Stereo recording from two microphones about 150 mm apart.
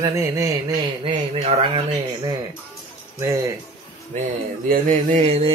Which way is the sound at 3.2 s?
20° right (ahead or behind).